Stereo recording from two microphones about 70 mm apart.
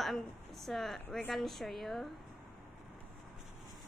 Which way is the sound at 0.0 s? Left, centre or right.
Centre.